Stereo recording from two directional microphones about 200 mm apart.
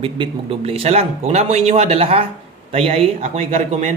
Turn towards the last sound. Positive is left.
turn(degrees=-35)  # may be behind; listen again after turning